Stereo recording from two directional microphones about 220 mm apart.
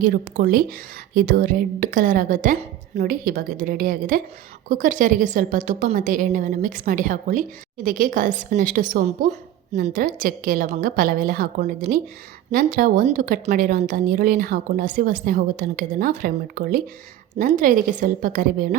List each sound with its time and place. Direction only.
0.0 s a woman's voice: 40° right (ahead or behind)